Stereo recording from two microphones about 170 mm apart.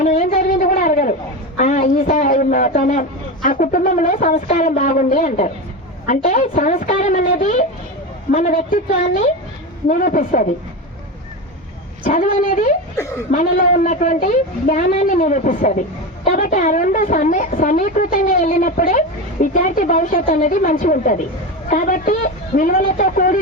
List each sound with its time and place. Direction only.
0.0 s a sound: 45° left (ahead or behind)
1.5 s a man's voice: 50° left (ahead or behind)
12.0 s a woman's voice: 55° left (ahead or behind)